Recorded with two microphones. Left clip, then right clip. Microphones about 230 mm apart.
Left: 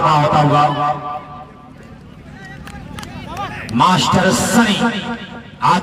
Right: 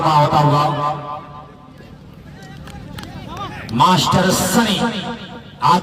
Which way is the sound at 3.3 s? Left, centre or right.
Left.